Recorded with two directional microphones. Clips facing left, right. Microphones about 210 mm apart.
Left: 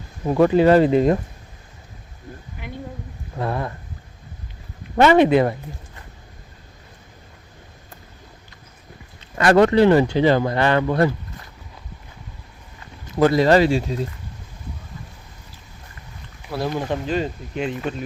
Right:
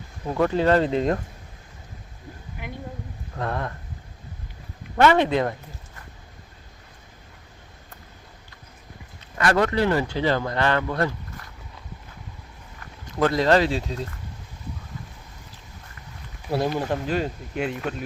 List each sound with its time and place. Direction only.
0.3 s speech: 15° left (ahead or behind)
3.3 s speech: 5° left (ahead or behind)
4.9 s speech: 15° left (ahead or behind)
9.4 s speech: 30° left (ahead or behind)
13.1 s speech: 5° left (ahead or behind)
16.5 s speech: 20° right (ahead or behind)
16.7 s speech: 5° right (ahead or behind)